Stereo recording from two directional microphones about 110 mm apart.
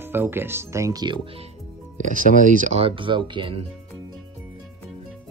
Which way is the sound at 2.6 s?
70° right (ahead or behind).